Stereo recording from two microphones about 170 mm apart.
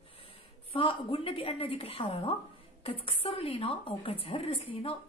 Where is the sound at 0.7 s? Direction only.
30° left (ahead or behind).